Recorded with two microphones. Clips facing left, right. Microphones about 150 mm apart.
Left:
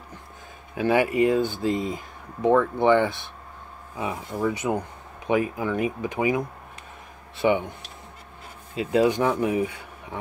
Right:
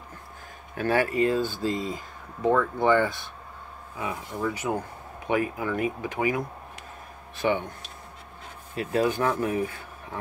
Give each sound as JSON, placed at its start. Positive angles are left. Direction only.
{"t": 0.7, "sound": "speech", "side_deg": 15}
{"t": 7.4, "sound": "speech", "side_deg": 15}
{"t": 8.7, "sound": "speech", "side_deg": 20}